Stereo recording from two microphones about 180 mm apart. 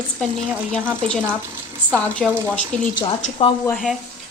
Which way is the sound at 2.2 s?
Centre (ahead or behind).